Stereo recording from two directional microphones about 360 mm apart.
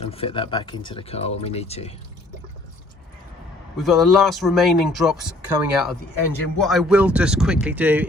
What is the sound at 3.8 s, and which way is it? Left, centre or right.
Speech, centre.